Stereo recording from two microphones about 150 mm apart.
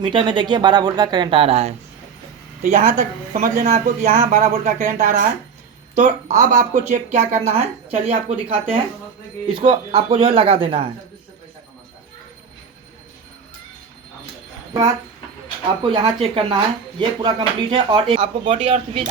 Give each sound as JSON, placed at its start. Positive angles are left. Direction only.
{"t": 0.0, "sound": "speech", "side_deg": -35}
{"t": 2.6, "sound": "a man's voice", "side_deg": -60}
{"t": 15.8, "sound": "speech", "side_deg": -30}